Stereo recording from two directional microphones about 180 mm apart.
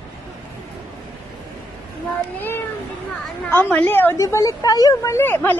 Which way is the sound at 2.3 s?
10° left (ahead or behind).